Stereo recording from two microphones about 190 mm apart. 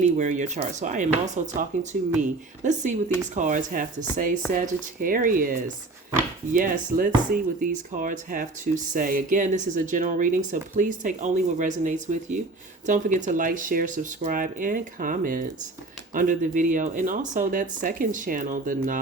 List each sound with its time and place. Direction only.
0.0 s speech: 40° right (ahead or behind)